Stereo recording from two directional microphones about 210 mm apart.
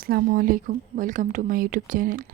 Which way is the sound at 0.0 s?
45° right (ahead or behind).